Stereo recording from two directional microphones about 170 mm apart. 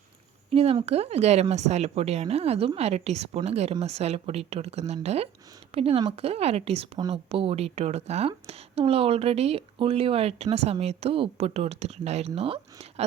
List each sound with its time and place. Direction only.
0.5 s speech: 35° right (ahead or behind)